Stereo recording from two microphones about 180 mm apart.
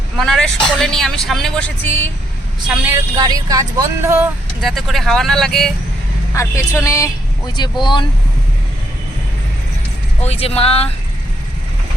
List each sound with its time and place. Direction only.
0.2 s speech: 5° left (ahead or behind)
3.2 s speech: 20° right (ahead or behind)
4.6 s speech: centre (ahead or behind)
6.3 s speech: 15° left (ahead or behind)
10.2 s speech: 35° left (ahead or behind)